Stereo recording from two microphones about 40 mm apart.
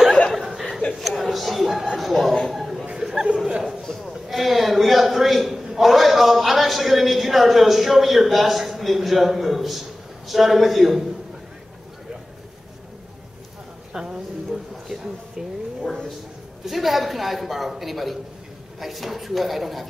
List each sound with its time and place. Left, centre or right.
0.4 s chuckle: centre
0.9 s a sound: centre
3.0 s chatter: centre
3.8 s sheep: centre
4.3 s a sound: centre
13.9 s a man's voice: centre